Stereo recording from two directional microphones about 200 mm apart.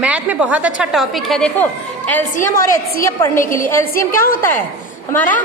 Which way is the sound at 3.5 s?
40° left (ahead or behind).